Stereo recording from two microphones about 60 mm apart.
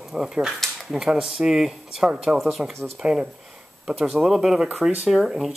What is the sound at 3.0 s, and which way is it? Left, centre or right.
Speech, right.